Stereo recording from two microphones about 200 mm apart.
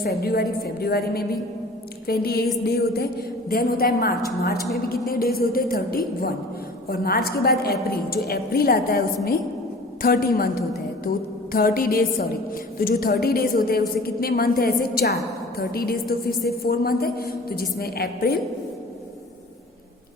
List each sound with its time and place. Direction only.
0.0 s a woman's voice: 50° left (ahead or behind)
11.5 s a woman's voice: 45° left (ahead or behind)